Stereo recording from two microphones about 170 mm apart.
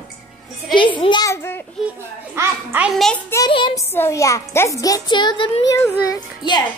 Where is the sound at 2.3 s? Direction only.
15° right (ahead or behind).